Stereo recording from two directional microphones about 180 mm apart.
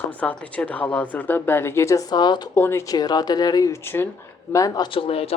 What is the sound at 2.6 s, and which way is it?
Speech, 15° left (ahead or behind).